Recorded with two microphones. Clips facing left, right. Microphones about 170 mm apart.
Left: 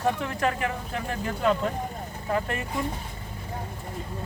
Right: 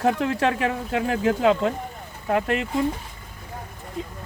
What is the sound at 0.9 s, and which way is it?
Speech, 90° right.